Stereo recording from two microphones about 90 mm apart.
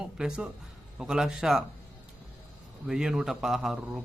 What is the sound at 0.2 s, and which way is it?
A man's voice, 10° right (ahead or behind).